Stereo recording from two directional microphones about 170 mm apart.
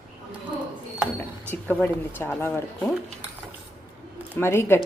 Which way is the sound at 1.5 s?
10° left (ahead or behind).